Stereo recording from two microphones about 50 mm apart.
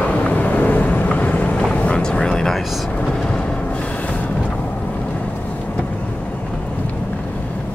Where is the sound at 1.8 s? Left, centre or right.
Left.